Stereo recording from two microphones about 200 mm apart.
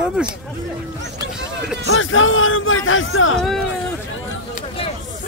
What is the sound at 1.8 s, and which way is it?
Speech, 85° left.